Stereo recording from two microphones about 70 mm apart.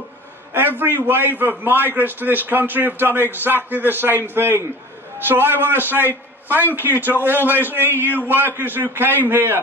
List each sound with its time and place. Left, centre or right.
0.5 s a man's voice: right